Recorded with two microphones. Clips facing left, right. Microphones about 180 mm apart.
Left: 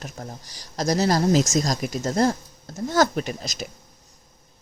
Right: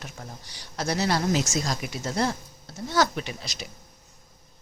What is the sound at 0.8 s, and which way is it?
Speech, 40° left (ahead or behind).